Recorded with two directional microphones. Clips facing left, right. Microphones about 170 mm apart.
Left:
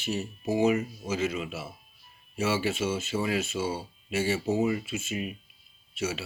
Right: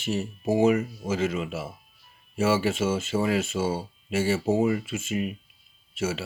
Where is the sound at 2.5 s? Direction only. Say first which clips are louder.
Right 4 dB; 50° right (ahead or behind).